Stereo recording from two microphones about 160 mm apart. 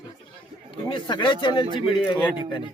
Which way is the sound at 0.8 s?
30° left (ahead or behind).